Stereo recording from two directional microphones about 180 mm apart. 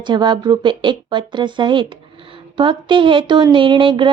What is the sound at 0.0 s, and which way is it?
Speech, 25° right (ahead or behind).